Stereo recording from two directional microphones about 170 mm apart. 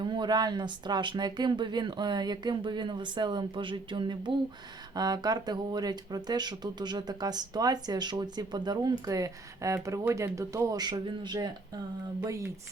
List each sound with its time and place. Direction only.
0.0 s speech: 25° right (ahead or behind)